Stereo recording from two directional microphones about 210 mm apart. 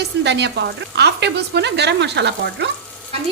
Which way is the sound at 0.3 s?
55° right (ahead or behind).